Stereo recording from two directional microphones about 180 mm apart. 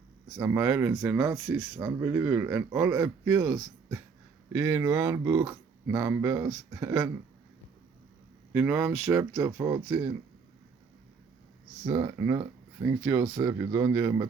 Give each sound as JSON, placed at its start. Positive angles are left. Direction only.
{"t": 0.3, "sound": "speech", "side_deg": -15}
{"t": 8.5, "sound": "speech", "side_deg": -10}
{"t": 11.9, "sound": "speech", "side_deg": -20}